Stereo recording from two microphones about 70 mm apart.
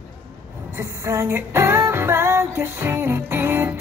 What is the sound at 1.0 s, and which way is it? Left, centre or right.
Music, right.